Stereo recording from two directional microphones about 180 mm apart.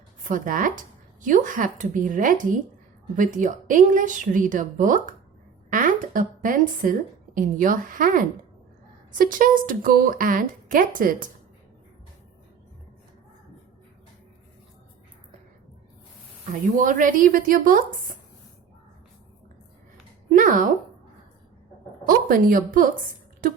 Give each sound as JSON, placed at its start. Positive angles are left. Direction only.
{"t": 0.3, "sound": "a woman's voice", "side_deg": -50}
{"t": 16.5, "sound": "speech", "side_deg": -45}
{"t": 20.3, "sound": "speech", "side_deg": -45}
{"t": 22.0, "sound": "speech", "side_deg": -50}